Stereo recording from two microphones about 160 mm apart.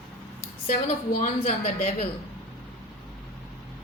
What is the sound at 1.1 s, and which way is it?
Speech, 50° left (ahead or behind).